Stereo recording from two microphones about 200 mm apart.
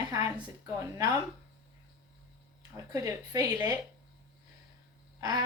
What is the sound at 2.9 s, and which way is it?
Speech, 15° right (ahead or behind).